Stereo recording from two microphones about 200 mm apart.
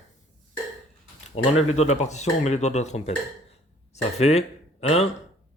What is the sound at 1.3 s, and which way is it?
Mantra, 30° left (ahead or behind).